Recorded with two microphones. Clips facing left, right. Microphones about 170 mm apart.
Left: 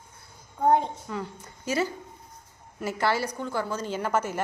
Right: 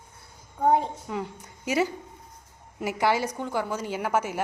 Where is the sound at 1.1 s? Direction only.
15° right (ahead or behind).